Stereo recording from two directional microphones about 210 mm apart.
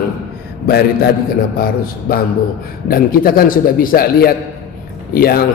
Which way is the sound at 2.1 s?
45° left (ahead or behind).